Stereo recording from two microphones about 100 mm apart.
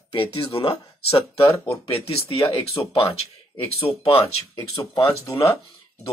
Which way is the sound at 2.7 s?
65° left (ahead or behind).